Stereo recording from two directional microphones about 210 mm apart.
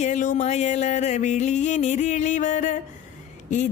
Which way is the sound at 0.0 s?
35° left (ahead or behind).